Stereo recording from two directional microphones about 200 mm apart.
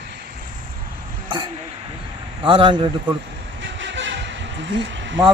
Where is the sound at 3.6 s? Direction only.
65° right (ahead or behind).